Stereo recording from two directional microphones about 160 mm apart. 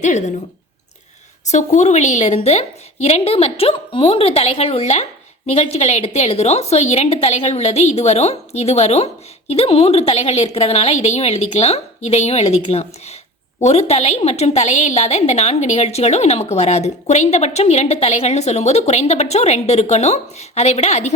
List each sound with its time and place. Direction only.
0.0 s a woman's voice: 50° left (ahead or behind)
1.5 s a woman's voice: 45° left (ahead or behind)